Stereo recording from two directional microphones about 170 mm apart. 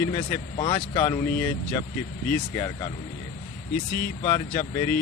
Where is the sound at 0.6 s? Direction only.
25° left (ahead or behind).